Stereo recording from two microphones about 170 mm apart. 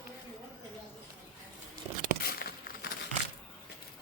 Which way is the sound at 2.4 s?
60° left (ahead or behind).